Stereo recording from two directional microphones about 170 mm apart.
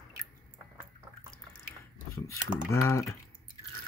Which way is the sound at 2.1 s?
15° left (ahead or behind).